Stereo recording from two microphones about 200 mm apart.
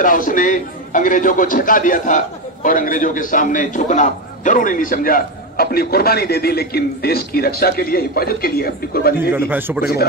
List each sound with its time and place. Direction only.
0.0 s a man's voice: 40° left (ahead or behind)
9.3 s a man's voice: 10° right (ahead or behind)